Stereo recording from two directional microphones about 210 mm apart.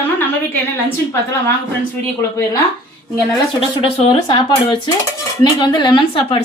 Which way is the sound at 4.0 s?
25° left (ahead or behind).